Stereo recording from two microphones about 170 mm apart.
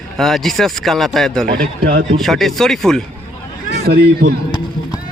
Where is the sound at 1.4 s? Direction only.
60° right (ahead or behind).